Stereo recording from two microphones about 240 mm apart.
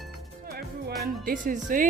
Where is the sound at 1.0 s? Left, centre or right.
Right.